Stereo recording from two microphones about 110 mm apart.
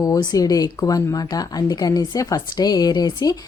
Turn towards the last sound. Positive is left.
turn(degrees=40)  # may be behind; listen again after turning